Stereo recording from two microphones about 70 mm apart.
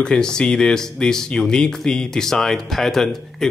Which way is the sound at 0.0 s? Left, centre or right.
Centre.